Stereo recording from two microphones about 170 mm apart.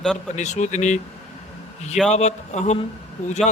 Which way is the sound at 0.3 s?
45° left (ahead or behind).